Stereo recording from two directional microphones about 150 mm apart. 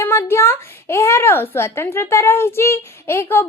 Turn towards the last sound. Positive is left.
turn(degrees=15)  # may be behind; listen again after turning